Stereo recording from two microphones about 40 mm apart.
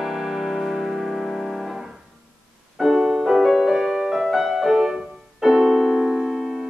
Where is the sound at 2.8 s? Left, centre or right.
Centre.